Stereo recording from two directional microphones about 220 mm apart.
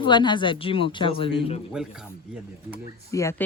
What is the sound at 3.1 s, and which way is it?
Speech, 15° left (ahead or behind).